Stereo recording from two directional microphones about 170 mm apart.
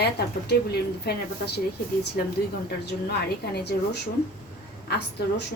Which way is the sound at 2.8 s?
75° left (ahead or behind).